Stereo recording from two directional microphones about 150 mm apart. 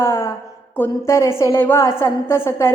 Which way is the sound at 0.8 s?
20° left (ahead or behind).